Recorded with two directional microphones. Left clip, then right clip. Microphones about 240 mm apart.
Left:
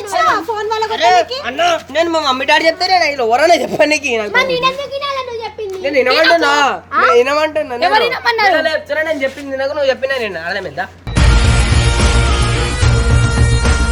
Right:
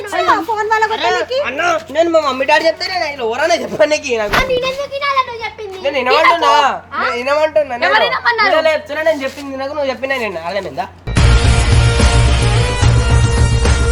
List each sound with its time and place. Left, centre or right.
0.5 s a sound: centre
0.9 s a man's voice: left
6.0 s a man's voice: left
9.6 s a man's voice: left
11.2 s music: centre